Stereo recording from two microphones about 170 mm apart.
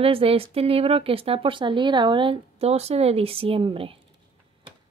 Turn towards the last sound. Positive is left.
turn(degrees=-30)  # may be behind; listen again after turning